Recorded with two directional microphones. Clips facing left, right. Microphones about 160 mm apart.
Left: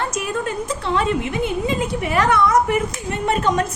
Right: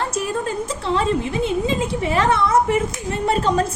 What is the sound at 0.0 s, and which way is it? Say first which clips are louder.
A woman's voice: right 1 dB; 30° right (ahead or behind).